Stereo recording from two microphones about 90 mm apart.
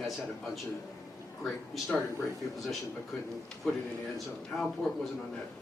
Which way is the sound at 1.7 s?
Centre (ahead or behind).